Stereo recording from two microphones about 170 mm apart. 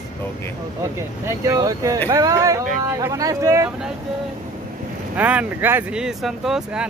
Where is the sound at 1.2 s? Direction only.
20° right (ahead or behind).